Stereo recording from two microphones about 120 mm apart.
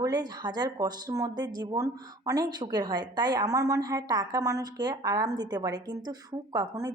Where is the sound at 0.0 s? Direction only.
35° right (ahead or behind).